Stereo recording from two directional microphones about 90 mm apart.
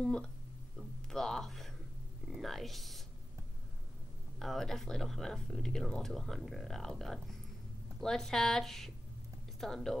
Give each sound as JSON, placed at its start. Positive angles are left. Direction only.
{"t": 0.0, "sound": "speech", "side_deg": 10}
{"t": 0.7, "sound": "a sound", "side_deg": 5}
{"t": 2.2, "sound": "speech", "side_deg": 0}
{"t": 4.4, "sound": "speech", "side_deg": 5}